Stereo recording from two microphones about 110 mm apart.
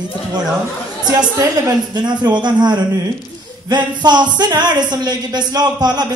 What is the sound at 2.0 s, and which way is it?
Speech, 40° right (ahead or behind).